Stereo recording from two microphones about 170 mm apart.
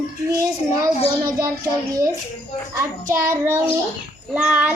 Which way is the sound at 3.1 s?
15° right (ahead or behind).